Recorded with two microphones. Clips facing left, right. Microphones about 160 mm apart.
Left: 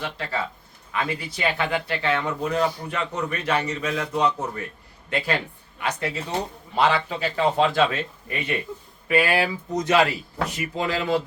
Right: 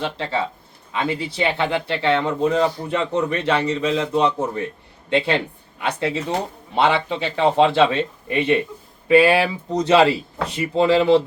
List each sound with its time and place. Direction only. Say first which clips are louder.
0.0 s a man's voice: right 5 dB; 25° right (ahead or behind)